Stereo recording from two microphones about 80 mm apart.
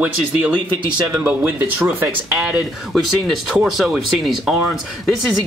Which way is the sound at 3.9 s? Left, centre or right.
Centre.